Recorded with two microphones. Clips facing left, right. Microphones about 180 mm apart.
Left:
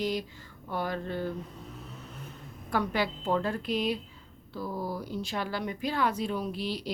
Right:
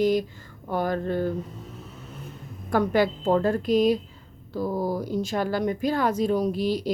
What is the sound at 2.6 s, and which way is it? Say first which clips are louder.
Speech: right 8 dB; 45° right (ahead or behind).